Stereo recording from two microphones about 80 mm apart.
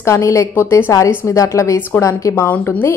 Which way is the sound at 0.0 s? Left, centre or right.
Left.